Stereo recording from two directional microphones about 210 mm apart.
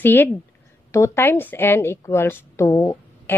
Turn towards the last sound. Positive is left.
turn(degrees=15)  # may be behind; listen again after turning